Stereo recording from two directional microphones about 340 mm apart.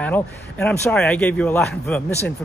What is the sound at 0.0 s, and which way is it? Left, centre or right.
Speech, centre.